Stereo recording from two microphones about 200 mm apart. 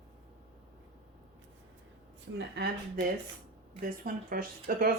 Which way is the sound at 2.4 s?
55° right (ahead or behind).